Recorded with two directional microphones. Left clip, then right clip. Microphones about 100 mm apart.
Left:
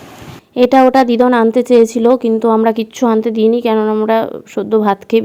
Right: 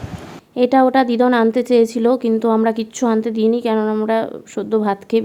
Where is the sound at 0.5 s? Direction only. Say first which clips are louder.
Left 5 dB; 40° left (ahead or behind).